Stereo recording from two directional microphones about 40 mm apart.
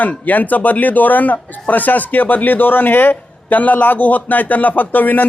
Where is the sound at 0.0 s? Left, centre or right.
Left.